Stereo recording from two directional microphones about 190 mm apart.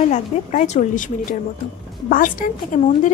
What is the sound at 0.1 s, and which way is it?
A woman's voice, 40° left (ahead or behind).